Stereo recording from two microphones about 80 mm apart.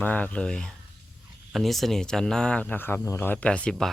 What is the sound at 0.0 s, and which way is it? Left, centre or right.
Speech, centre.